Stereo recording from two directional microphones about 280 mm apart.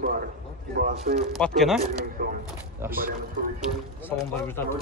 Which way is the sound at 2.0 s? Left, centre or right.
Right.